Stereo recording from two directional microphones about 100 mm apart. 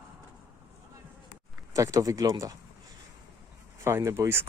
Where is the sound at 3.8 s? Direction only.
30° right (ahead or behind).